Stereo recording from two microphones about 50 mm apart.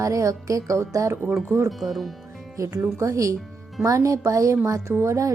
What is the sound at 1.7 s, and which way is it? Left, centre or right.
Speech, centre.